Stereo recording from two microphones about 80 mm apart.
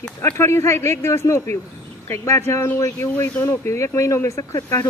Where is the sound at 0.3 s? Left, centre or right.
Left.